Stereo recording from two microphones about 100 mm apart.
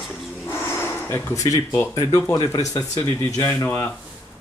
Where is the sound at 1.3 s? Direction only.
35° left (ahead or behind).